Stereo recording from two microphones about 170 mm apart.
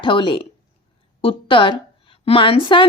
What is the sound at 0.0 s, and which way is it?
A woman's voice, 30° left (ahead or behind).